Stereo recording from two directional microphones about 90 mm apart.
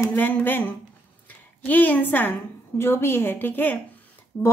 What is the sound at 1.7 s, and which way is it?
A woman's voice, 20° left (ahead or behind).